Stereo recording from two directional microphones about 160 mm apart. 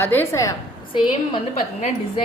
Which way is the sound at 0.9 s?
30° left (ahead or behind).